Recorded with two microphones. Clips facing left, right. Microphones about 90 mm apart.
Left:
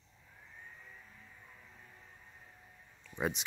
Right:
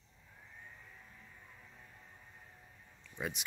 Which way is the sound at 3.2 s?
25° left (ahead or behind).